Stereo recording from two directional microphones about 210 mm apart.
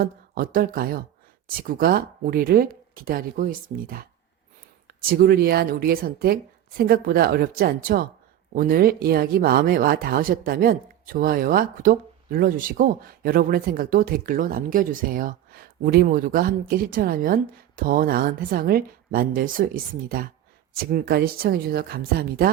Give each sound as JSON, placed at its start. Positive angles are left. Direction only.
{"t": 0.0, "sound": "speech", "side_deg": -45}
{"t": 5.0, "sound": "speech", "side_deg": -45}